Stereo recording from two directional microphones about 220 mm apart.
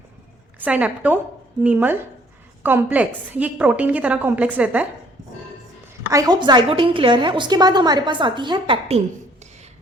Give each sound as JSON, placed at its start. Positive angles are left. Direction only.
{"t": 0.6, "sound": "a woman's voice", "side_deg": -5}
{"t": 6.1, "sound": "a woman's voice", "side_deg": -15}